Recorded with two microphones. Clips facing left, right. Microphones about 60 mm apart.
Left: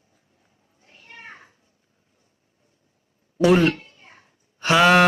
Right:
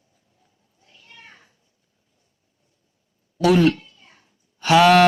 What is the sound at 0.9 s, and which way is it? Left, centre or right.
Children playing, left.